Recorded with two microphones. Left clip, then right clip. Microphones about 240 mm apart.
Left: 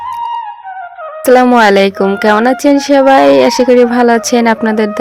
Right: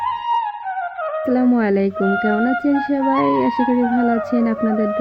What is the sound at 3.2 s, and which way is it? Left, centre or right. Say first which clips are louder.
Speech: left 11 dB; left.